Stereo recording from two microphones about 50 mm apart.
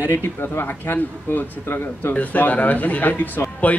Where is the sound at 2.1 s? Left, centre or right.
Left.